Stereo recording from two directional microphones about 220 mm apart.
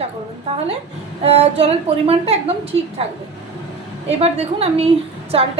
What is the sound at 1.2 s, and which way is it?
A woman's voice, 25° right (ahead or behind).